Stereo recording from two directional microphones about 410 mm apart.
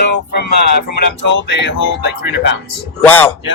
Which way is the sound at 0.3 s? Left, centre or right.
Left.